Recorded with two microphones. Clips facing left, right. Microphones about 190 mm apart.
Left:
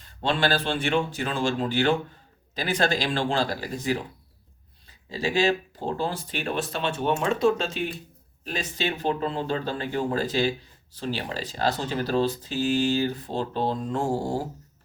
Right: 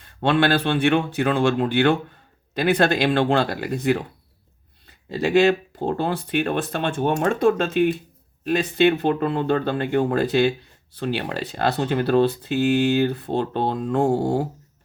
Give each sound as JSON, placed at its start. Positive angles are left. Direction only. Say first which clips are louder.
{"t": 0.0, "sound": "speech", "louder": "right 6 dB", "side_deg": -60}